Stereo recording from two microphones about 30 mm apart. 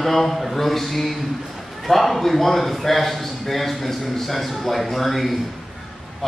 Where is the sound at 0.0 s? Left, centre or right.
Centre.